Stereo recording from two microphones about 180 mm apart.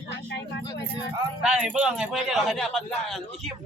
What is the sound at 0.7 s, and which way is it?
Vehicle, 20° left (ahead or behind).